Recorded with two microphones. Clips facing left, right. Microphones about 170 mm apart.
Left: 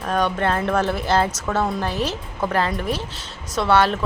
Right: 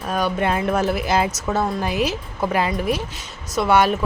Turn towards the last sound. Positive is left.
turn(degrees=-10)  # may be behind; listen again after turning